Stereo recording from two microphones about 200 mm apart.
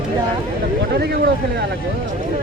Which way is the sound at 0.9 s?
55° right (ahead or behind).